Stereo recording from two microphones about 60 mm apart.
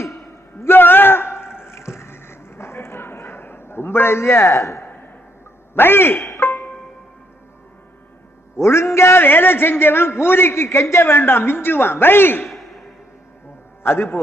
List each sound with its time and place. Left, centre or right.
0.6 s a sound: left
5.7 s a man's voice: left
6.4 s music: left
8.6 s a man's voice: left
13.8 s a man's voice: left